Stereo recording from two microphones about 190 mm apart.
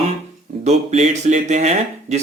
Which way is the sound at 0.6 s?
35° right (ahead or behind).